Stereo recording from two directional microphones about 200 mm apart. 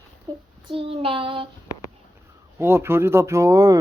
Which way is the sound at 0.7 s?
25° right (ahead or behind).